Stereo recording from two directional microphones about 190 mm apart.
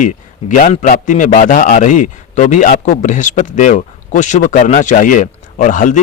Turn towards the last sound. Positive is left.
turn(degrees=45)  # may be behind; listen again after turning